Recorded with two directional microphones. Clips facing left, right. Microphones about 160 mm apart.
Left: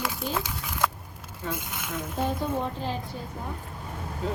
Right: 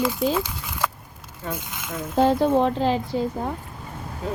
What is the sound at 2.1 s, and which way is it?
A woman's voice, 90° right.